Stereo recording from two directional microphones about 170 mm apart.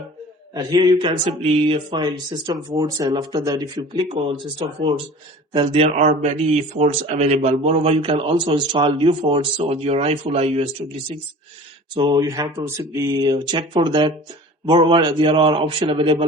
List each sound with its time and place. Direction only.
0.5 s speech: 25° right (ahead or behind)
11.9 s speech: 25° right (ahead or behind)